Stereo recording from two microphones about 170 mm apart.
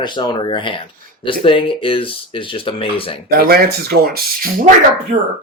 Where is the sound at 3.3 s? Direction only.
65° right (ahead or behind).